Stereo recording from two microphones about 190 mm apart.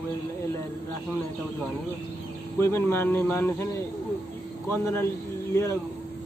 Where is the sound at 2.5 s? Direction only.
15° left (ahead or behind).